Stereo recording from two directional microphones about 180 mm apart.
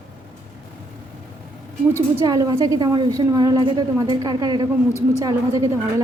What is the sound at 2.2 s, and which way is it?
A woman's voice, 20° right (ahead or behind).